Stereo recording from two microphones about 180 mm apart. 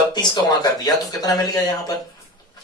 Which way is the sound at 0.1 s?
25° left (ahead or behind).